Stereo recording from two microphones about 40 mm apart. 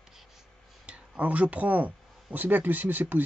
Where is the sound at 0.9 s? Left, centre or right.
Right.